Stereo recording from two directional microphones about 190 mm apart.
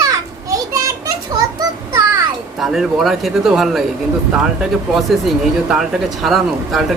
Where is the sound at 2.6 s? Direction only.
Centre (ahead or behind).